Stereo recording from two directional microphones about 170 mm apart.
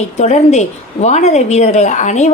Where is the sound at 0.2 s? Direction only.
40° left (ahead or behind).